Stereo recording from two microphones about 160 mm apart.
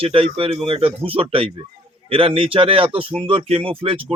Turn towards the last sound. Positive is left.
turn(degrees=-35)  # may be behind; listen again after turning